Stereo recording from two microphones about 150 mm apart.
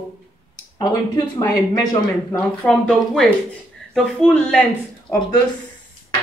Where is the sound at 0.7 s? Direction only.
30° left (ahead or behind).